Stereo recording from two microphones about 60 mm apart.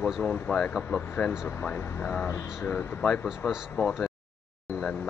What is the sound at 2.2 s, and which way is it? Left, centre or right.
Speech, left.